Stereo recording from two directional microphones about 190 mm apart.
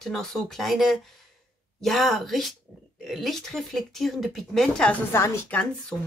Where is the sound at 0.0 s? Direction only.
Centre (ahead or behind).